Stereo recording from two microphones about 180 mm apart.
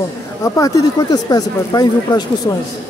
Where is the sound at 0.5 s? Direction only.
20° left (ahead or behind).